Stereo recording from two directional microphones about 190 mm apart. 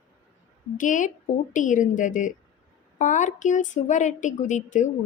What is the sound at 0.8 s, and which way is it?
A woman's voice, 40° left (ahead or behind).